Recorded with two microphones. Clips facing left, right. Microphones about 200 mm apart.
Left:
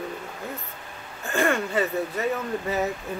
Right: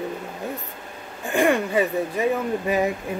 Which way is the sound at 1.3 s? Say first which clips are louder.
Right 4 dB; 15° right (ahead or behind).